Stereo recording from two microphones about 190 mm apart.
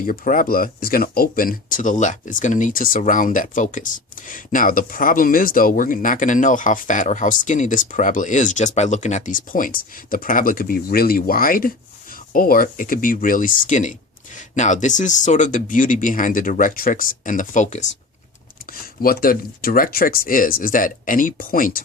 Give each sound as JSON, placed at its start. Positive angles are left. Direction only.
{"t": 0.0, "sound": "speech", "side_deg": 45}
{"t": 18.6, "sound": "speech", "side_deg": 50}